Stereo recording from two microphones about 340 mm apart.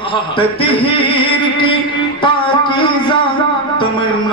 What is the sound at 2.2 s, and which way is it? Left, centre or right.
Music, centre.